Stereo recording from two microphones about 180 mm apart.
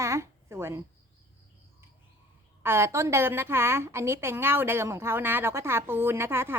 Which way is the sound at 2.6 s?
15° right (ahead or behind).